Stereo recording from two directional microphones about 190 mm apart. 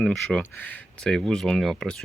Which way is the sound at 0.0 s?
5° left (ahead or behind).